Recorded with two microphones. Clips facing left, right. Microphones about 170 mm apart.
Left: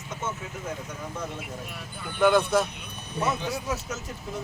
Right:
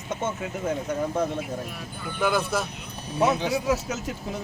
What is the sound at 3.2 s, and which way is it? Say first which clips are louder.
Speech: right 6 dB; 90° right.